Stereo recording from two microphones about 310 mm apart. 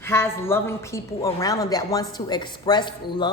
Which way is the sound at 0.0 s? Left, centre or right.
Centre.